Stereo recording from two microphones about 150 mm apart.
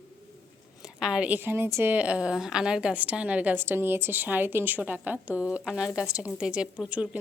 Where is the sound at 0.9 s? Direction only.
5° right (ahead or behind).